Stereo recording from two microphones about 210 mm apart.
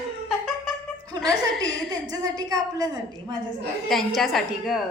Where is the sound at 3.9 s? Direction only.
Centre (ahead or behind).